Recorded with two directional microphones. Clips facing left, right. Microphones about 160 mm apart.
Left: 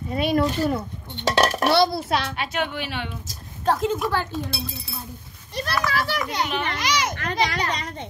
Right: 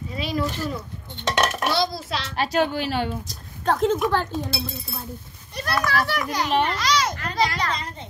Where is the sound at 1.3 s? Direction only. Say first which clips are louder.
Left 2 dB; 35° left (ahead or behind).